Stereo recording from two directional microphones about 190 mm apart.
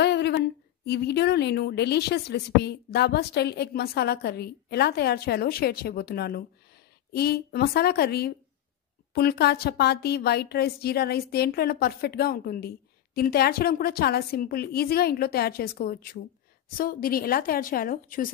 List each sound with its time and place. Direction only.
0.0 s a woman's voice: 65° left (ahead or behind); by 18.3 s 50° left (ahead or behind)